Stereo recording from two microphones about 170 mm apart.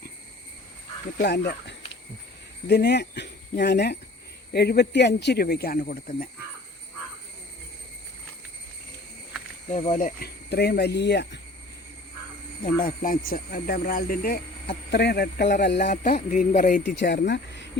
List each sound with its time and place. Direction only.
1.2 s a man's voice: 75° left (ahead or behind)
4.5 s a man's voice: 70° left (ahead or behind)
9.7 s speech: 45° left (ahead or behind)
10.2 s a man's voice: 70° left (ahead or behind); by 11.3 s 90° left
12.8 s speech: 55° left (ahead or behind); by 15.5 s 75° left (ahead or behind)
15.6 s speech: 90° left
15.9 s speech: 45° left (ahead or behind)
16.8 s speech: 90° left